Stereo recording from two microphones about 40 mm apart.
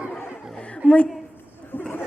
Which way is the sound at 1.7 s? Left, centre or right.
Left.